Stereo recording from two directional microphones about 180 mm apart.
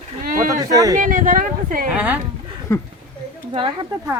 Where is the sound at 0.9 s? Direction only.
50° right (ahead or behind).